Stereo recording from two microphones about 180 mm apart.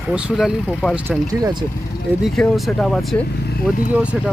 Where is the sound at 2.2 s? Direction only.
Centre (ahead or behind).